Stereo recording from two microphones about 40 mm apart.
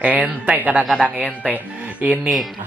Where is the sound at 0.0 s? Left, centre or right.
Right.